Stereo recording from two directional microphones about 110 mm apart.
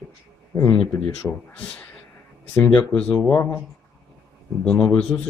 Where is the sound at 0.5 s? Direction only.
25° left (ahead or behind).